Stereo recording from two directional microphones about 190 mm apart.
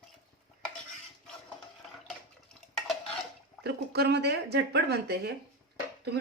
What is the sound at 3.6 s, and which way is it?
A woman's voice, 60° right (ahead or behind).